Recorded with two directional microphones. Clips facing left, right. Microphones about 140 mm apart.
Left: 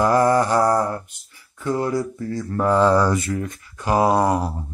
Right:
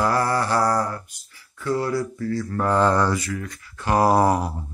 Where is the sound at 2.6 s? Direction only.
5° left (ahead or behind).